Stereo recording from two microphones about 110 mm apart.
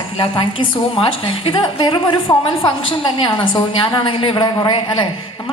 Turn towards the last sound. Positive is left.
turn(degrees=50)  # may be behind; listen again after turning